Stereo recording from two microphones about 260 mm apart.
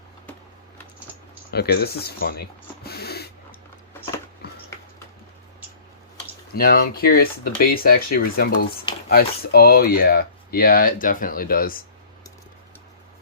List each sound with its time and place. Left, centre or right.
1.5 s speech: left
6.5 s speech: left